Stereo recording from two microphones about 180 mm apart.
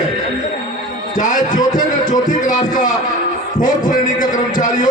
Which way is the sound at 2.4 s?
45° left (ahead or behind).